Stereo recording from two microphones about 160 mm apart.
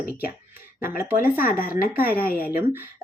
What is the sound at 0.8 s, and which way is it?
Speech, 65° left (ahead or behind).